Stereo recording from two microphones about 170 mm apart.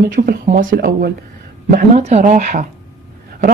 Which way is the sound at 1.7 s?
45° right (ahead or behind).